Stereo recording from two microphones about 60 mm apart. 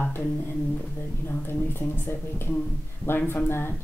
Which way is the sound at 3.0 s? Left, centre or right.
Left.